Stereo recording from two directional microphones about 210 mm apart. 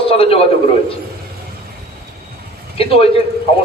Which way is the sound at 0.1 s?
25° left (ahead or behind).